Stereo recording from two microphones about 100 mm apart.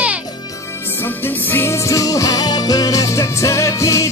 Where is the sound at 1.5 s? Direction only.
30° left (ahead or behind).